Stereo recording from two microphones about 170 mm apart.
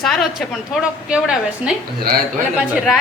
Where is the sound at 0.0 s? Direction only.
Centre (ahead or behind).